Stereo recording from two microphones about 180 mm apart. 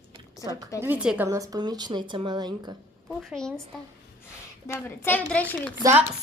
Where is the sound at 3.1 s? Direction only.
Centre (ahead or behind).